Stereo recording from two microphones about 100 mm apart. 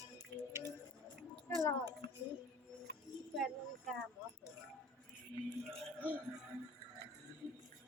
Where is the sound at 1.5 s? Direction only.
20° left (ahead or behind).